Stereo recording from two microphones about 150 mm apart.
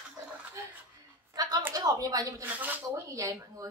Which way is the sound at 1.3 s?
25° right (ahead or behind).